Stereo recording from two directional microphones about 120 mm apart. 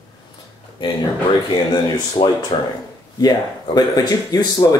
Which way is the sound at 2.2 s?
40° left (ahead or behind).